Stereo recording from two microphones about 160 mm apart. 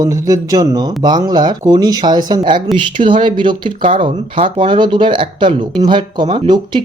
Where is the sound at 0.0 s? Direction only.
20° right (ahead or behind).